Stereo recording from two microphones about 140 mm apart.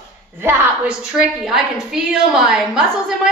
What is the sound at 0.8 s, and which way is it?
A woman's voice, 5° right (ahead or behind).